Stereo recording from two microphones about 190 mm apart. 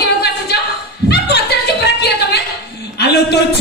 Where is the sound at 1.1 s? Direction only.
60° left (ahead or behind).